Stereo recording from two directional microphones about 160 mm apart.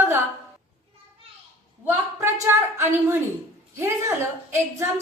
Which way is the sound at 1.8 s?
15° right (ahead or behind).